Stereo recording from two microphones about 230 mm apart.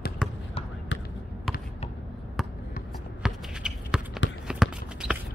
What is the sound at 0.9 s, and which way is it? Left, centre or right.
Basketball bounce, left.